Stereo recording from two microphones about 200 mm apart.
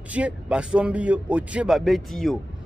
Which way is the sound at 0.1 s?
5° right (ahead or behind).